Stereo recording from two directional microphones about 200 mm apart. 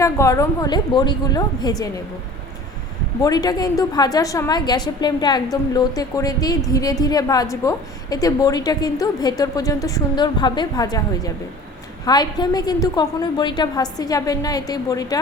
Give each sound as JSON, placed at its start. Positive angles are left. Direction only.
{"t": 0.0, "sound": "a woman's voice", "side_deg": 15}
{"t": 3.2, "sound": "a woman's voice", "side_deg": 20}